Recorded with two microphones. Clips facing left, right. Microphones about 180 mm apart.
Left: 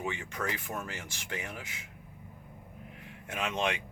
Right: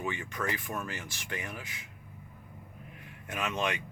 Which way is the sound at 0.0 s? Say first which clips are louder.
Right 1 dB; 20° left (ahead or behind).